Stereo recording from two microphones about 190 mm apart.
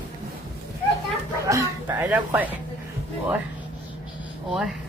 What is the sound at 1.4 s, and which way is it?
Speech, 15° right (ahead or behind).